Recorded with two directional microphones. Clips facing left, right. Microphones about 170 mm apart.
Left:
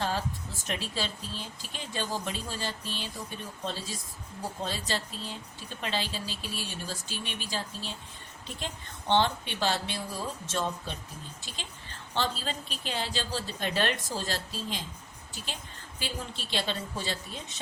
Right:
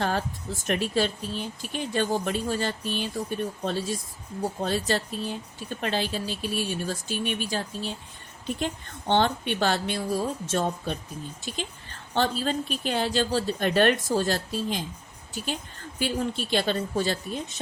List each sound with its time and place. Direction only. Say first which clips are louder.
0.0 s a sound: right 4 dB; 55° right (ahead or behind)
0.7 s a woman's voice: right 9 dB; 55° right (ahead or behind)
12.1 s speech: right 7 dB; 55° right (ahead or behind)
16.0 s a woman's voice: right 10 dB; 55° right (ahead or behind)